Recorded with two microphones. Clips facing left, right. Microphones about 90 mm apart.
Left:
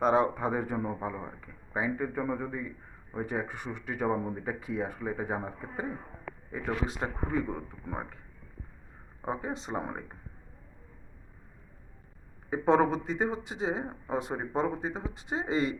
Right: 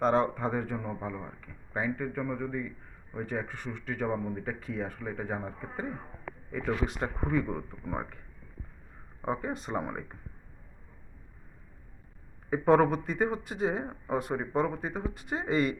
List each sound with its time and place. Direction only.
0.0 s speech: 10° left (ahead or behind)
6.8 s speech: 25° left (ahead or behind)
7.9 s speech: 15° left (ahead or behind)
9.2 s speech: 15° left (ahead or behind)
12.5 s speech: 20° left (ahead or behind)